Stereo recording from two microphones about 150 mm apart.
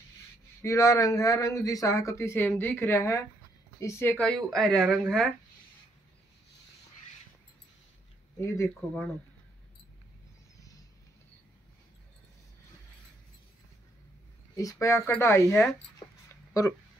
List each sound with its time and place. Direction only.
0.6 s speech: 20° left (ahead or behind); by 5.3 s 5° left (ahead or behind)
8.4 s speech: 20° left (ahead or behind)
14.6 s speech: 20° left (ahead or behind)